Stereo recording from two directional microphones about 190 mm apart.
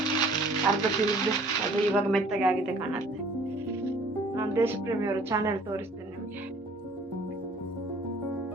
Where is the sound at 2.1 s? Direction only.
Centre (ahead or behind).